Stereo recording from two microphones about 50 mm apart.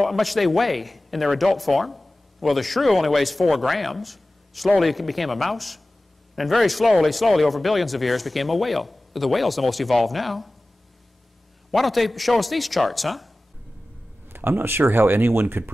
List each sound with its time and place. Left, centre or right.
0.0 s speech: centre
11.7 s speech: centre
14.3 s speech: right